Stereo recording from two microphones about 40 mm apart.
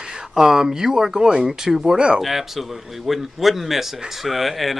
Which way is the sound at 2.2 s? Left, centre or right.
Centre.